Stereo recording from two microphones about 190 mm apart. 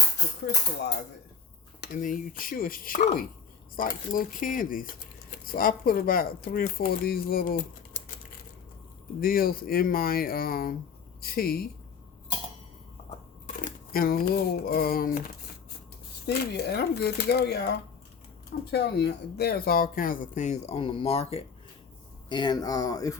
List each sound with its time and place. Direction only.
1.8 s speech: 45° left (ahead or behind)
9.2 s speech: 50° left (ahead or behind)
13.7 s speech: 50° left (ahead or behind)
16.2 s speech: 60° left (ahead or behind); by 23.1 s 20° left (ahead or behind)